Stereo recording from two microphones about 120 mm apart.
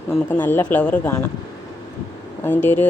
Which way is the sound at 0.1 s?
15° left (ahead or behind).